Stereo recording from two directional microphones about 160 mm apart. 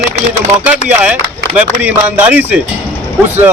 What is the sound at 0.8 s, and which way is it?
A man's voice, 5° right (ahead or behind).